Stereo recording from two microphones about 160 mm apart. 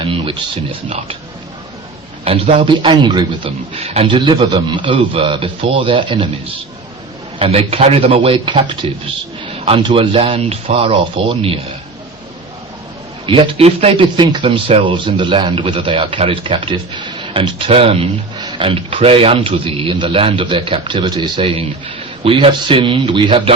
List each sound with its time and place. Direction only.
0.0 s a sound: 35° right (ahead or behind)
2.2 s a man's voice: 35° right (ahead or behind)
7.3 s a man's voice: 35° right (ahead or behind)
13.2 s a man's voice: 30° right (ahead or behind)
18.3 s a sound: 30° right (ahead or behind)
19.0 s a man's voice: 35° right (ahead or behind)